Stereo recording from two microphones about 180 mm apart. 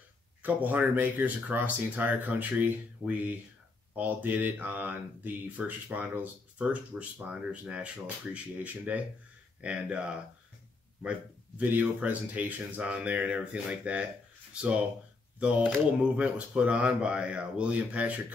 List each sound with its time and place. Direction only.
0.4 s speech: 10° right (ahead or behind)
3.9 s speech: 10° right (ahead or behind)
15.3 s speech: 5° right (ahead or behind)